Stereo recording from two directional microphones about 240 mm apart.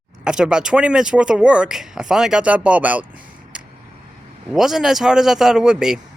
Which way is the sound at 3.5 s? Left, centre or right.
Centre.